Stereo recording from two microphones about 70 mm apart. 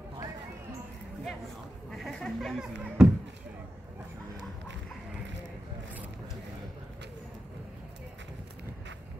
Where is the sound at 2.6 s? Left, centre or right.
Centre.